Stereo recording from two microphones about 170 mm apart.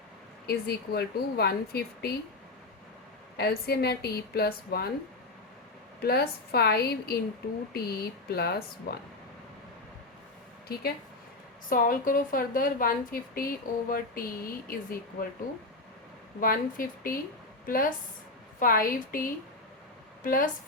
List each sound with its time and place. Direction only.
0.4 s a woman's voice: 70° left (ahead or behind)
3.3 s a woman's voice: 70° left (ahead or behind)
6.0 s a woman's voice: 70° left (ahead or behind)
11.7 s a woman's voice: 55° left (ahead or behind)
16.4 s a woman's voice: 55° left (ahead or behind)